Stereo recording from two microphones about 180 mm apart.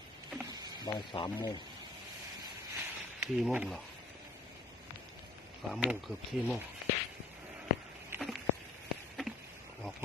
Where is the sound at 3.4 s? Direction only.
5° right (ahead or behind).